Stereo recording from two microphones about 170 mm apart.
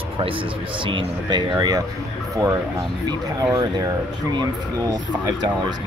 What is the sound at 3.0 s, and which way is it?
Speech, 20° right (ahead or behind).